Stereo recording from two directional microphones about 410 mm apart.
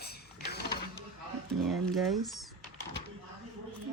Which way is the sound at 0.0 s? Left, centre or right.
Left.